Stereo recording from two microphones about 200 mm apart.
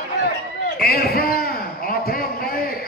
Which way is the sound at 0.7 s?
50° left (ahead or behind).